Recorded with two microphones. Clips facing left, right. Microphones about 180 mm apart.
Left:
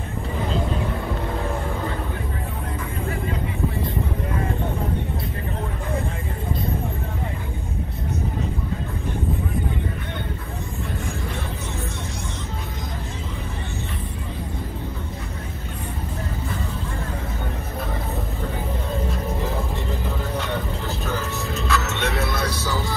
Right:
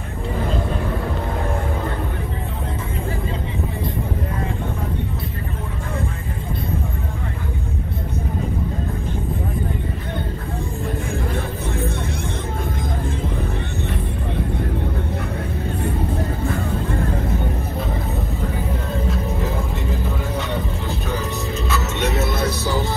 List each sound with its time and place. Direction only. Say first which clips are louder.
21.6 s music: right 1 dB; 20° right (ahead or behind)